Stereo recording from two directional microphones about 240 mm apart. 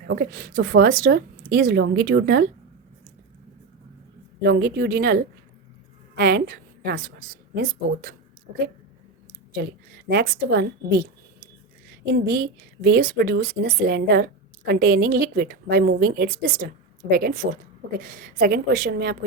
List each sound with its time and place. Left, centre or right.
0.1 s a woman's voice: right
4.4 s a woman's voice: right
10.1 s a woman's voice: right
12.1 s a woman's voice: right